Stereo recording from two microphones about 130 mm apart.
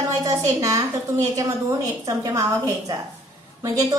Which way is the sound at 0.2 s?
25° right (ahead or behind).